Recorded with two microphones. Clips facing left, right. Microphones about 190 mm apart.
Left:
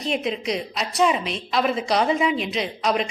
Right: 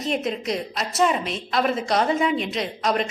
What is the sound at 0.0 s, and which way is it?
A woman's voice, centre (ahead or behind).